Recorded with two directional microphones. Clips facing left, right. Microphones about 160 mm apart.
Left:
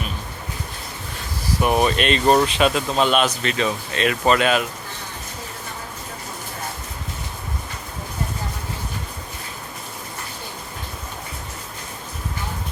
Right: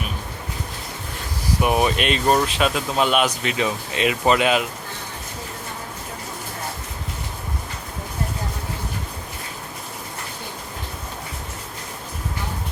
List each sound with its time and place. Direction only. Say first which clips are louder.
1.6 s speech: left 1 dB; 10° right (ahead or behind)